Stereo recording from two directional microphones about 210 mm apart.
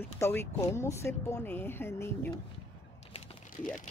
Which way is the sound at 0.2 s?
10° left (ahead or behind).